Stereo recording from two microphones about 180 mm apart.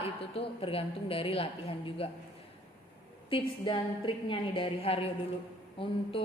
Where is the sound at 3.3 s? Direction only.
30° left (ahead or behind).